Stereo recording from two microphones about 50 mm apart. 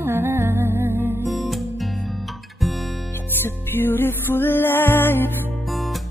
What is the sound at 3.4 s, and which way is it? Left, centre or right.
Music, left.